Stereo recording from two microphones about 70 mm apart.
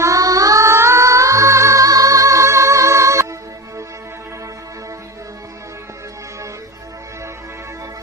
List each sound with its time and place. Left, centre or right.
0.0 s music: right